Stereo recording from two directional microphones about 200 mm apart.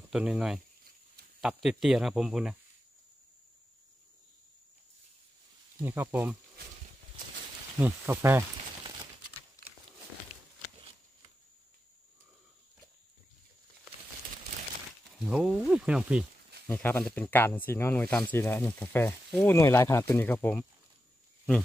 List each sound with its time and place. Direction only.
0.1 s speech: 5° right (ahead or behind)
5.9 s speech: 10° right (ahead or behind)
7.8 s speech: 10° right (ahead or behind)
9.6 s horse: 15° left (ahead or behind)
10.3 s walk: 30° left (ahead or behind)
15.1 s speech: 5° right (ahead or behind)
16.6 s speech: 10° left (ahead or behind)